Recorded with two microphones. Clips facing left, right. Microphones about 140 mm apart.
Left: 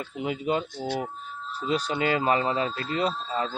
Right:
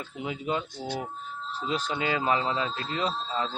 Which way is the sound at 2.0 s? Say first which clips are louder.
Left 2 dB; 50° left (ahead or behind).